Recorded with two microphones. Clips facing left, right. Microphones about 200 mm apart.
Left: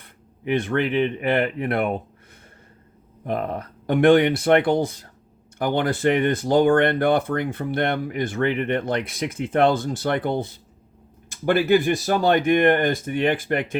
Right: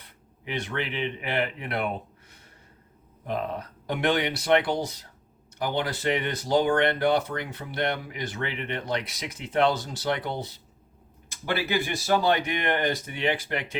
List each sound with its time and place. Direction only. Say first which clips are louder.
0.0 s speech: left 10 dB; 50° left (ahead or behind)
3.2 s speech: left 4 dB; 55° left (ahead or behind)